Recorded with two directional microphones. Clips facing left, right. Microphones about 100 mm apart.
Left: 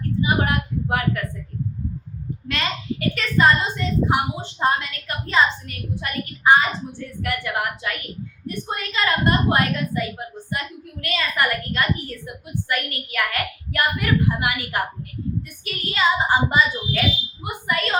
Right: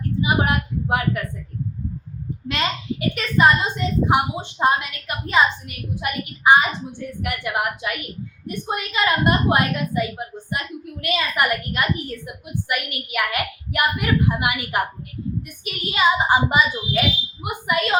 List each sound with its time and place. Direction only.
0.2 s speech: 20° right (ahead or behind)
2.5 s a woman's voice: 20° right (ahead or behind)